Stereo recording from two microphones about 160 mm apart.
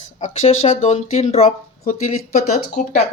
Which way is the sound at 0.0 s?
45° left (ahead or behind).